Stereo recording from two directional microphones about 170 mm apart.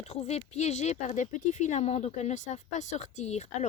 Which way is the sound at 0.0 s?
40° left (ahead or behind).